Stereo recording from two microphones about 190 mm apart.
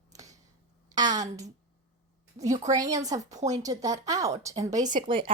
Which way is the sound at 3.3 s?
40° right (ahead or behind).